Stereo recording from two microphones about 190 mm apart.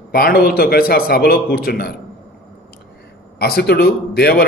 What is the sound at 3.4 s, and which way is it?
A man's voice, 55° left (ahead or behind).